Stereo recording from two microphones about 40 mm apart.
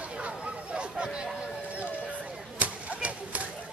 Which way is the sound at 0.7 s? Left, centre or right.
Right.